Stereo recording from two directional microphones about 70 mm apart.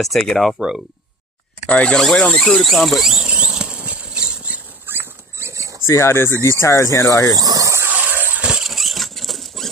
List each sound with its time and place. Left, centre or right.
0.0 s speech: centre
0.6 s speech: centre
1.7 s speech: centre
2.0 s speech: centre
3.3 s a sound: centre
4.9 s dog: right
5.4 s a sound: right
5.9 s speech: left
7.3 s squeal: right
7.9 s a sound: right
8.5 s rodents: centre